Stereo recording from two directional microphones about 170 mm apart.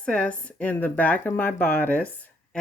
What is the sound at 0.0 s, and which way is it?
Speech, 5° left (ahead or behind).